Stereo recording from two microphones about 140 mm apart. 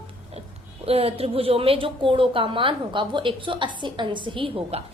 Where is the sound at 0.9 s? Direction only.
45° right (ahead or behind).